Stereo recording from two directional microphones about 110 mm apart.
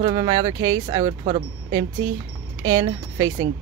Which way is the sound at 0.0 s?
45° right (ahead or behind).